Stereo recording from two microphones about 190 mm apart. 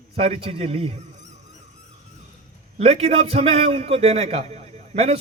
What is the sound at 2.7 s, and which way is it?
A man's voice, 30° right (ahead or behind).